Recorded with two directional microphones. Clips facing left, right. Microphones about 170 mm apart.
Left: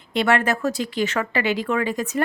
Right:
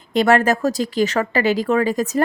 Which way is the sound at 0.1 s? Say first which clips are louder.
Right 5 dB; 40° right (ahead or behind).